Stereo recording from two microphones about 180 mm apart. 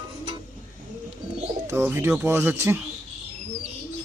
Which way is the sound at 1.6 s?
15° right (ahead or behind).